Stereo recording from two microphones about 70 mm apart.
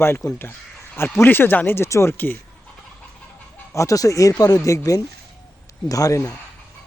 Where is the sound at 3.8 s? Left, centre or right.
Left.